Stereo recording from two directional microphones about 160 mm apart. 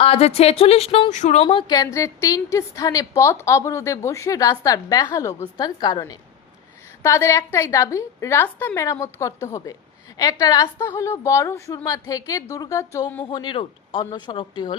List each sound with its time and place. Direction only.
0.0 s speech: 40° left (ahead or behind)
1.5 s a woman's voice: 25° left (ahead or behind)